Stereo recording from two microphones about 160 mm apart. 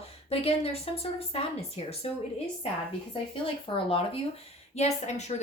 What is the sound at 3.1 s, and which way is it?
Speech, 35° left (ahead or behind).